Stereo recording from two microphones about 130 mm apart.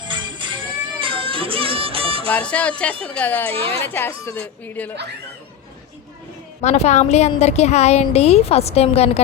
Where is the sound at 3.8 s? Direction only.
15° left (ahead or behind).